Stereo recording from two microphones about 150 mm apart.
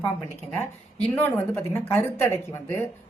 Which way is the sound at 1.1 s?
15° left (ahead or behind).